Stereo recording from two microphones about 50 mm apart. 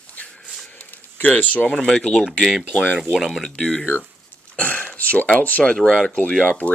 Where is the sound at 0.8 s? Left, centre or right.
Left.